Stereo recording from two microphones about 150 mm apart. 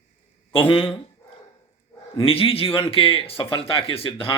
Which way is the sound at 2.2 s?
35° left (ahead or behind).